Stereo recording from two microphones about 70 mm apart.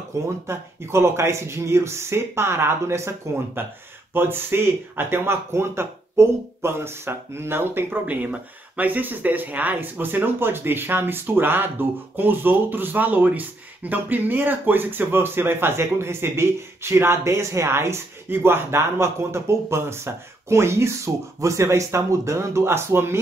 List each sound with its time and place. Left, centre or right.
0.5 s speech: right